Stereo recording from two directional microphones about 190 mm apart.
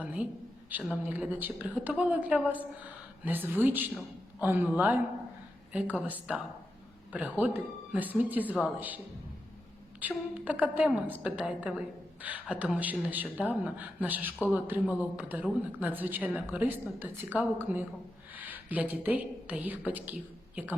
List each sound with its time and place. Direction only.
0.0 s a man's voice: 10° right (ahead or behind)
10.0 s a woman's voice: 10° right (ahead or behind)